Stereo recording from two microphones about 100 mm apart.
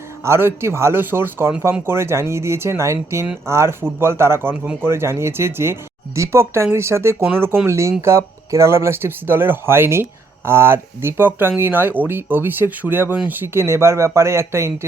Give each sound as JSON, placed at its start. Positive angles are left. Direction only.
{"t": 0.3, "sound": "speech", "side_deg": -25}